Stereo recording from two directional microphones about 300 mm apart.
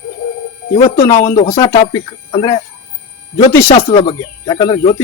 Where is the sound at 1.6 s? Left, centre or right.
Centre.